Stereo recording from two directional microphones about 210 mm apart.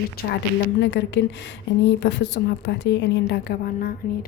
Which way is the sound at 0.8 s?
55° left (ahead or behind).